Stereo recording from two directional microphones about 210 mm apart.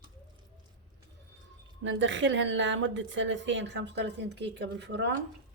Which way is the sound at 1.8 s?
60° right (ahead or behind).